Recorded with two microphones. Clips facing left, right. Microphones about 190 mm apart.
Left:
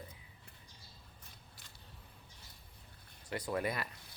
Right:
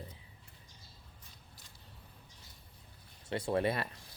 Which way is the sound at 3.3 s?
25° right (ahead or behind).